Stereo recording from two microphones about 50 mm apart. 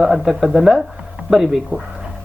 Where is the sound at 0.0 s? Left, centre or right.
Centre.